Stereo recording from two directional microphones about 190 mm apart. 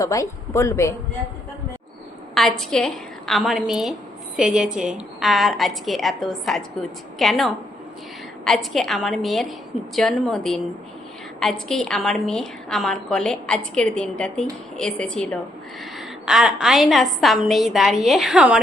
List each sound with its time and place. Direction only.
0.0 s speech: 15° left (ahead or behind)
2.3 s a woman's voice: centre (ahead or behind)
11.7 s a woman's voice: centre (ahead or behind)